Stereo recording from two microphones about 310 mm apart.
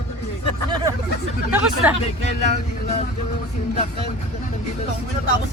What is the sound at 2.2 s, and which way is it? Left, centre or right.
Speech, left.